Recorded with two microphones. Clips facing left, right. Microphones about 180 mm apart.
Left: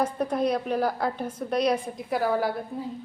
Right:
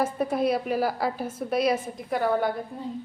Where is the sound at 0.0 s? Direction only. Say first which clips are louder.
Even; 5° right (ahead or behind).